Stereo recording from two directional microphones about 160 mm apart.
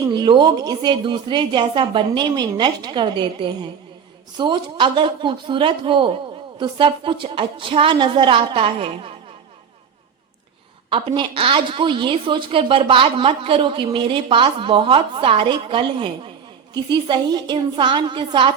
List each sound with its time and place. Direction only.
0.1 s a woman's voice: 30° right (ahead or behind)
10.8 s a woman's voice: 35° right (ahead or behind)